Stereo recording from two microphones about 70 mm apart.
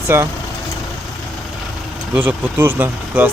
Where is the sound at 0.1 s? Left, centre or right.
Right.